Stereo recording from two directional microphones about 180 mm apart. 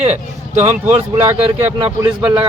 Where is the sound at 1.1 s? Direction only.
15° right (ahead or behind).